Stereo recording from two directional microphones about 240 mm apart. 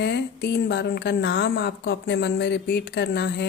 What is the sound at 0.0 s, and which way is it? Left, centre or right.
Speech, left.